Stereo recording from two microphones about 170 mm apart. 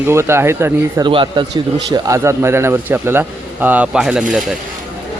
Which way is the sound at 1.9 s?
20° right (ahead or behind).